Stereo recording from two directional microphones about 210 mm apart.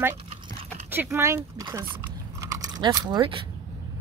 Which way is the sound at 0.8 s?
10° right (ahead or behind).